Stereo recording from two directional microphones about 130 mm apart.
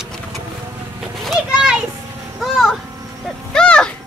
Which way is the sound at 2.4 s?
Centre (ahead or behind).